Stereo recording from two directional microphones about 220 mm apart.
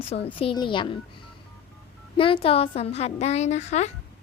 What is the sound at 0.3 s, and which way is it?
Speech, 25° left (ahead or behind).